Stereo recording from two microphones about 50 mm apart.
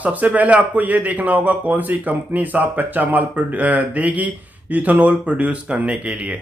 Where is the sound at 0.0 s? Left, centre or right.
Right.